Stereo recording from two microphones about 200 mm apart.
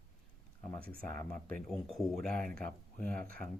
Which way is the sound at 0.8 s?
45° right (ahead or behind).